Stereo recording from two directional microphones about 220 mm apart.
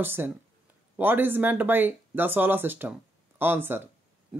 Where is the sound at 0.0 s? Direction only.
10° right (ahead or behind).